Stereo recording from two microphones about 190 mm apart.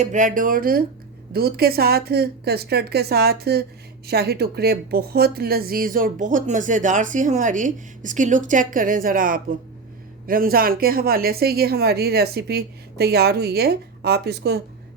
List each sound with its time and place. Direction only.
0.0 s speech: 40° right (ahead or behind); by 14.6 s 60° right (ahead or behind)